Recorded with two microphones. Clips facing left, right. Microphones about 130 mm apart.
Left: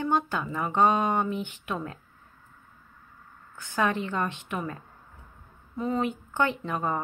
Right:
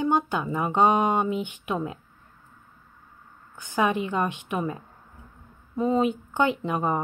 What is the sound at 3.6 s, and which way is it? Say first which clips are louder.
Speech: right 3 dB; 15° right (ahead or behind).